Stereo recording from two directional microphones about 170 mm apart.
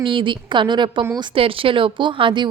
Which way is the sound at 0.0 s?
30° right (ahead or behind).